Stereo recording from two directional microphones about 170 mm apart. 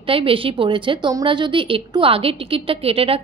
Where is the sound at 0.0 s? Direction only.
30° right (ahead or behind).